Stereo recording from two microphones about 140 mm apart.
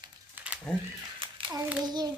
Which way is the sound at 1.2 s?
35° right (ahead or behind).